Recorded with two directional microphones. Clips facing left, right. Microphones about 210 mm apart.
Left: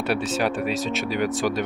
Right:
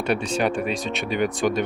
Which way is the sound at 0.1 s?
5° left (ahead or behind).